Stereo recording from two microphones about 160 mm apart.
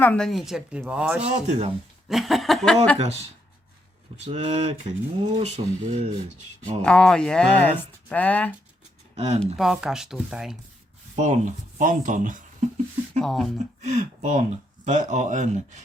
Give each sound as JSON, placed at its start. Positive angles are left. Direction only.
{"t": 0.0, "sound": "speech", "side_deg": 5}
{"t": 1.2, "sound": "speech", "side_deg": -40}
{"t": 2.0, "sound": "speech", "side_deg": 0}
{"t": 4.3, "sound": "speech", "side_deg": -40}
{"t": 6.8, "sound": "speech", "side_deg": 5}
{"t": 9.1, "sound": "speech", "side_deg": -40}
{"t": 9.6, "sound": "speech", "side_deg": 0}
{"t": 11.1, "sound": "speech", "side_deg": -45}
{"t": 13.2, "sound": "speech", "side_deg": 0}
{"t": 13.8, "sound": "speech", "side_deg": -45}